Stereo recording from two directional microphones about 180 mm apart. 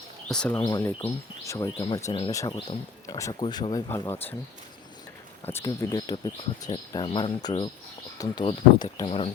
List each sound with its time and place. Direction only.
0.3 s speech: 5° left (ahead or behind)
0.6 s speech: 20° left (ahead or behind)
5.5 s speech: 15° left (ahead or behind); by 9.3 s 30° left (ahead or behind)